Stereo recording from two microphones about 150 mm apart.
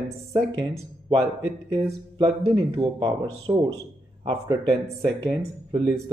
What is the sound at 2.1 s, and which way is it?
Speech, 25° right (ahead or behind).